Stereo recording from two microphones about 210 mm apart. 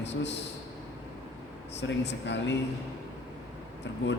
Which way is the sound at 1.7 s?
55° left (ahead or behind).